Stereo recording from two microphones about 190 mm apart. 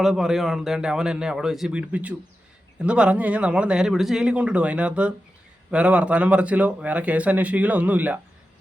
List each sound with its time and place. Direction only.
0.0 s a man's voice: centre (ahead or behind)